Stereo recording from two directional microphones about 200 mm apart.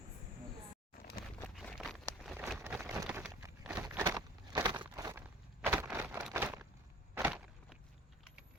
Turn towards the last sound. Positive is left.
turn(degrees=-10)  # may be behind; listen again after turning